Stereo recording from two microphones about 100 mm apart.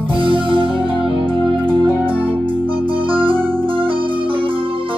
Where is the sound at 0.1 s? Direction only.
60° right (ahead or behind).